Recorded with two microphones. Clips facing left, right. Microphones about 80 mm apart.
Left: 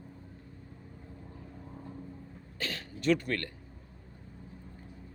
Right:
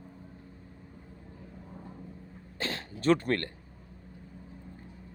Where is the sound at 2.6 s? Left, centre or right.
Right.